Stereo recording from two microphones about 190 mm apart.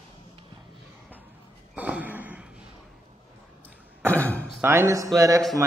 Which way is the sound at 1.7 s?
10° right (ahead or behind).